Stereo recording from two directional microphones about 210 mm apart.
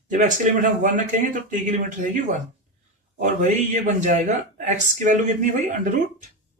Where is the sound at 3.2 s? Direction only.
35° right (ahead or behind).